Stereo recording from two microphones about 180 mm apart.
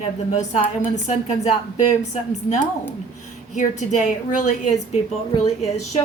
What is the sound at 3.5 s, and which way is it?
A woman's voice, 45° left (ahead or behind).